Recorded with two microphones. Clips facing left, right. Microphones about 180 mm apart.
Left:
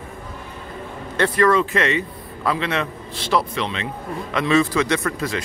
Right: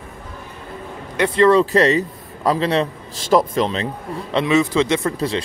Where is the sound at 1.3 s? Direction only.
30° right (ahead or behind).